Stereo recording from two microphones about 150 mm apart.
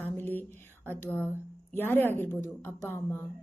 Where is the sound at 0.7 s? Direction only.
15° left (ahead or behind).